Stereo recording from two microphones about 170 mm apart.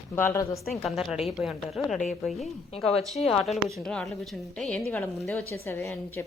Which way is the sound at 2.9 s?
35° left (ahead or behind).